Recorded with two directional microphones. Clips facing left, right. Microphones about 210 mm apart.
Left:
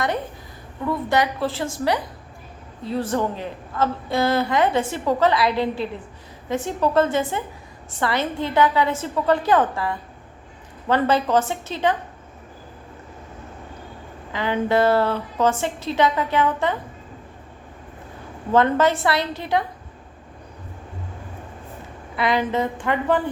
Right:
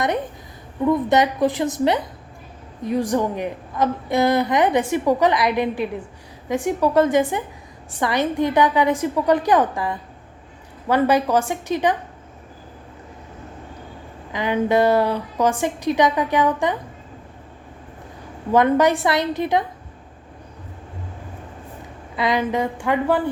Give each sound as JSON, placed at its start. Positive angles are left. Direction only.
{"t": 0.9, "sound": "a woman's voice", "side_deg": -20}
{"t": 14.3, "sound": "a woman's voice", "side_deg": -15}
{"t": 18.5, "sound": "a woman's voice", "side_deg": -15}
{"t": 22.1, "sound": "a woman's voice", "side_deg": -15}